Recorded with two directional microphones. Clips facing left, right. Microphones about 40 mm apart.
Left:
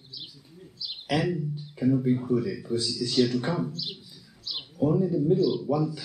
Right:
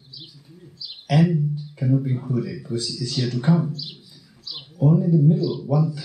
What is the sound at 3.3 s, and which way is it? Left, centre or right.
Speech, centre.